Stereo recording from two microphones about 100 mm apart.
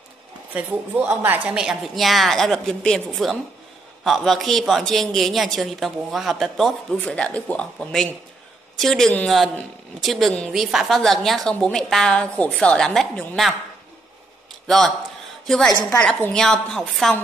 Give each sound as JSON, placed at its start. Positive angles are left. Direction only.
{"t": 0.6, "sound": "speech", "side_deg": -20}
{"t": 1.6, "sound": "a man's voice", "side_deg": -5}
{"t": 7.0, "sound": "a woman's voice", "side_deg": 10}
{"t": 15.4, "sound": "a woman's voice", "side_deg": 5}